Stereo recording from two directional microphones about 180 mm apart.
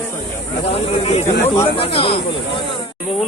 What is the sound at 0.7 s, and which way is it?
Speech, 35° left (ahead or behind).